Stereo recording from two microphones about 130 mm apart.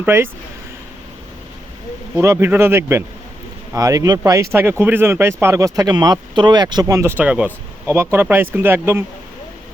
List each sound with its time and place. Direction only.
0.0 s speech: 15° right (ahead or behind)
2.1 s speech: 20° right (ahead or behind)
7.2 s speech: 10° right (ahead or behind)